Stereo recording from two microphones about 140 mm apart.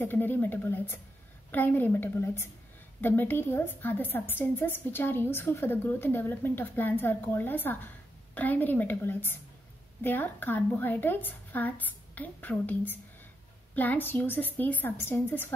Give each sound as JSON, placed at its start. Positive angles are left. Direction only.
{"t": 0.0, "sound": "a woman's voice", "side_deg": 15}